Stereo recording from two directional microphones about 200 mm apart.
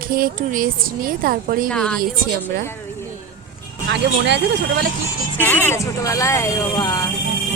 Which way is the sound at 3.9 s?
60° right (ahead or behind).